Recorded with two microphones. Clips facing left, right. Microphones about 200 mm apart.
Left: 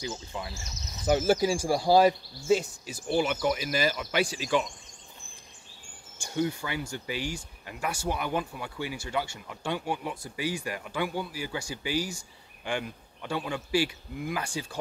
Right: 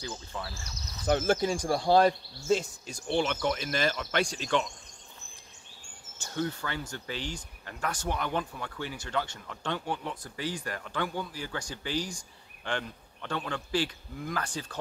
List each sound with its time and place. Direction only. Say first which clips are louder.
0.0 s speech: left 2 dB; 10° left (ahead or behind)
6.1 s speech: left 3 dB; 10° left (ahead or behind)